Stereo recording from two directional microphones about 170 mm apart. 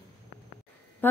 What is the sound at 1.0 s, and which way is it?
Quack, 10° left (ahead or behind).